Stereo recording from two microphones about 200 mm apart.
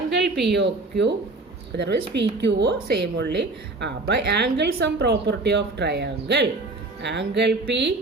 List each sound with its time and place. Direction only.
0.4 s a woman's voice: 60° right (ahead or behind)